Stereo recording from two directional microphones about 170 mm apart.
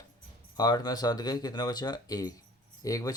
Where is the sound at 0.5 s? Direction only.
25° left (ahead or behind).